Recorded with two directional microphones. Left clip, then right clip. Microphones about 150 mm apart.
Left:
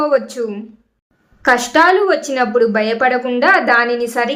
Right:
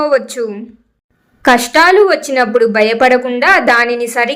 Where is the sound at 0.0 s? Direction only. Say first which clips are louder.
Right 2 dB; 25° right (ahead or behind).